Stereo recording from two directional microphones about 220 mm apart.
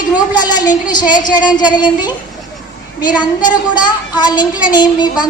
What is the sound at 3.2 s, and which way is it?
A woman's voice, 20° left (ahead or behind).